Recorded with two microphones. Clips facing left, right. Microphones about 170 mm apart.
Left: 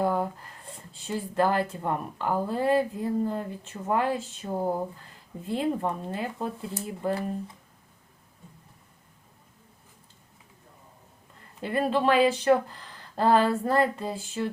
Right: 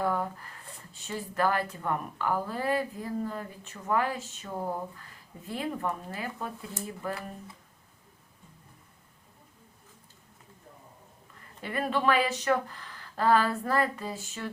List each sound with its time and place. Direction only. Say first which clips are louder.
0.0 s a sound: left 4 dB; 25° left (ahead or behind)
0.8 s a woman's voice: left 5 dB; 30° left (ahead or behind)
11.6 s a woman's voice: left 4 dB; 30° left (ahead or behind)